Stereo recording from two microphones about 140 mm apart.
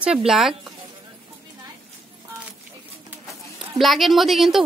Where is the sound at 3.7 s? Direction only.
Centre (ahead or behind).